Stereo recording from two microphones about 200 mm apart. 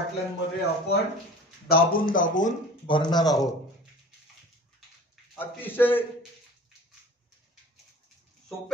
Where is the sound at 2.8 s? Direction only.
25° left (ahead or behind).